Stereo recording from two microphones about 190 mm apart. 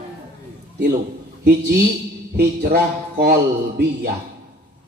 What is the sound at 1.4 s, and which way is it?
A man's voice, 60° right (ahead or behind).